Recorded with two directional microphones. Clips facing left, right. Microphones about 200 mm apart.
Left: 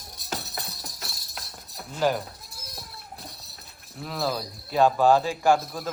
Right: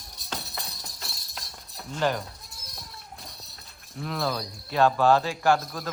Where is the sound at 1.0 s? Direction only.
Centre (ahead or behind).